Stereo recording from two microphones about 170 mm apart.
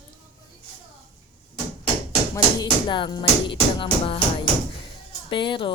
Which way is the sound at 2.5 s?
25° left (ahead or behind).